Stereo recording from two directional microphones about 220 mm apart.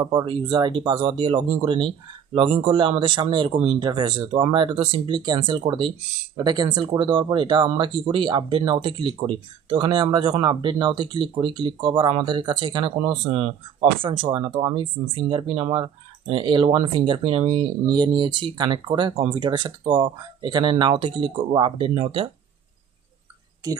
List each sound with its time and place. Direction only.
0.0 s speech: 20° right (ahead or behind)